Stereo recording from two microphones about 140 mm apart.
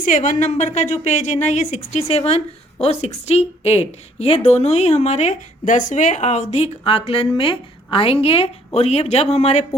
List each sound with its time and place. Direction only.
0.0 s a woman's voice: 65° left (ahead or behind)
2.0 s a woman's voice: 45° left (ahead or behind)